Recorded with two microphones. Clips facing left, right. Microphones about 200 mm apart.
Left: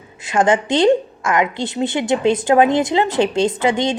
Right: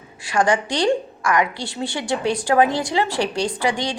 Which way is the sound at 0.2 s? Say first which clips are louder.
Left 3 dB; 20° left (ahead or behind).